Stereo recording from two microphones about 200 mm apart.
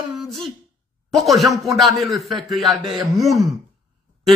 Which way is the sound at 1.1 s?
Centre (ahead or behind).